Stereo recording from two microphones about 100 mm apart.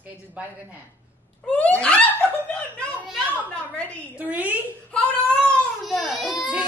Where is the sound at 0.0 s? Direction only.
15° right (ahead or behind).